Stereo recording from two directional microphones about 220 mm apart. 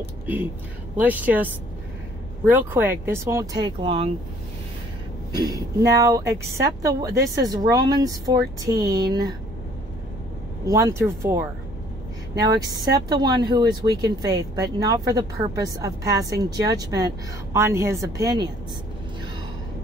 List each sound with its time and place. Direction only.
0.9 s speech: 5° right (ahead or behind); by 4.1 s 25° right (ahead or behind)
5.3 s speech: 15° right (ahead or behind)
10.7 s speech: 15° right (ahead or behind)